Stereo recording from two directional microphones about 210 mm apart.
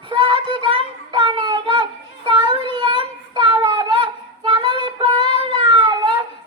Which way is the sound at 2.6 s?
20° right (ahead or behind).